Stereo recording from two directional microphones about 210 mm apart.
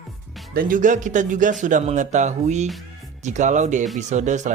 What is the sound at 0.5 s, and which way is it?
Speech, 40° right (ahead or behind).